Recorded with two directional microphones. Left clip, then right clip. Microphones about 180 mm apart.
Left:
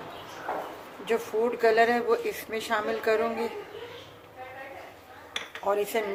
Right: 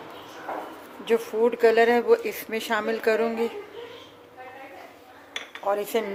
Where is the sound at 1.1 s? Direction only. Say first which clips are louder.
Right 4 dB; 45° right (ahead or behind).